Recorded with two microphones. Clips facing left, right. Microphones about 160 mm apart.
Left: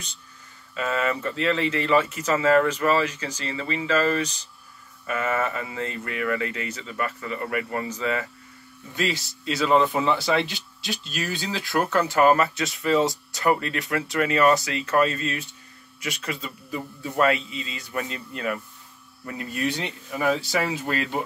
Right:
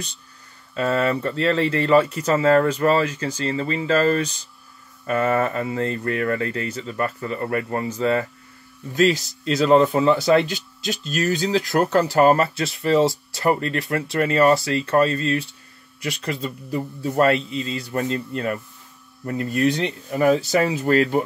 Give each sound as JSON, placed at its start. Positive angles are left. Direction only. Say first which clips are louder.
{"t": 0.7, "sound": "speech", "louder": "right 5 dB", "side_deg": -40}